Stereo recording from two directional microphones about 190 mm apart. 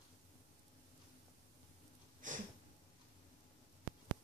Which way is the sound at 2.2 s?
45° right (ahead or behind).